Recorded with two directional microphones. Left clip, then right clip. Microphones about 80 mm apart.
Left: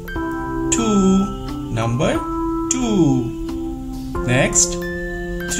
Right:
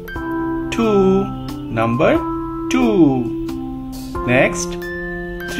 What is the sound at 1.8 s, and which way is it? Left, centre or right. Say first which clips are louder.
Speech: right 5 dB; centre.